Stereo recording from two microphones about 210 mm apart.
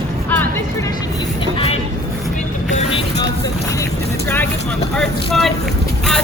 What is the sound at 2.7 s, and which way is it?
Music, 25° left (ahead or behind).